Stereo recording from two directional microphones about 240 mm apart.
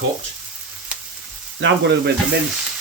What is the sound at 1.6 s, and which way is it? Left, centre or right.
Speech, right.